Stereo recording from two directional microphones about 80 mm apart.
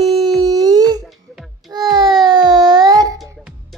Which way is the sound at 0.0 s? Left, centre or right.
Centre.